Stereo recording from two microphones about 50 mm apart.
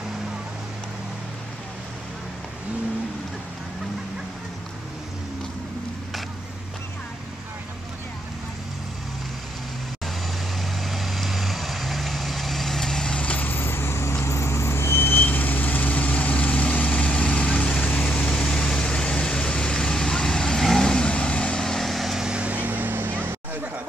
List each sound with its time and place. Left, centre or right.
10.0 s vehicle: centre
13.1 s vehicle: left
13.5 s vehicle: left
18.1 s vehicle: centre
22.2 s vehicle: right
22.5 s vehicle: right